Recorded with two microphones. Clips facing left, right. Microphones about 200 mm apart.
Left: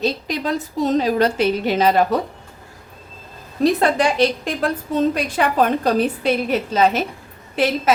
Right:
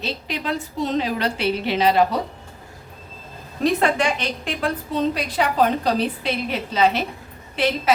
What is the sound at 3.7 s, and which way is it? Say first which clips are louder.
A woman's voice: left 4 dB; 35° left (ahead or behind).